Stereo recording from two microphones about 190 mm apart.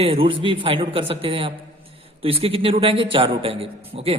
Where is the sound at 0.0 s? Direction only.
30° right (ahead or behind).